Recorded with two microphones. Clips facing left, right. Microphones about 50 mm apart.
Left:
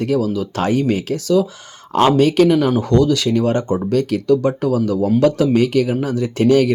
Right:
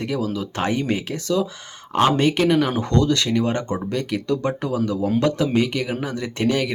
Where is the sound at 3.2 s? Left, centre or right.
Right.